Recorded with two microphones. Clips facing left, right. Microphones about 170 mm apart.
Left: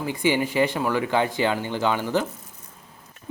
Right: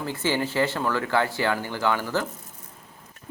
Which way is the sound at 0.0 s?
15° left (ahead or behind).